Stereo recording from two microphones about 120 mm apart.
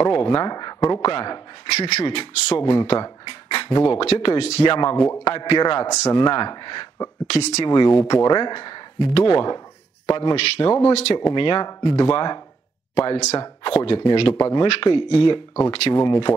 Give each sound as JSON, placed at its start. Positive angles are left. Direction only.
{"t": 0.0, "sound": "speech", "side_deg": 35}
{"t": 1.7, "sound": "a man's voice", "side_deg": 60}
{"t": 2.0, "sound": "speech", "side_deg": 40}
{"t": 4.1, "sound": "speech", "side_deg": 45}
{"t": 4.7, "sound": "speech", "side_deg": 40}
{"t": 7.6, "sound": "speech", "side_deg": 35}
{"t": 10.3, "sound": "a man's voice", "side_deg": 55}
{"t": 11.1, "sound": "speech", "side_deg": 40}
{"t": 13.7, "sound": "speech", "side_deg": 45}
{"t": 14.4, "sound": "speech", "side_deg": 35}
{"t": 15.9, "sound": "speech", "side_deg": 35}